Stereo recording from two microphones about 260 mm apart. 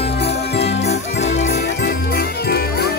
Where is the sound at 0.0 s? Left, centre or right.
Left.